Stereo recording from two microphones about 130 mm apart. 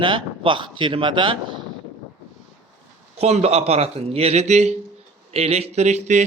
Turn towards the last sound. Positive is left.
turn(degrees=-60)  # may be behind; listen again after turning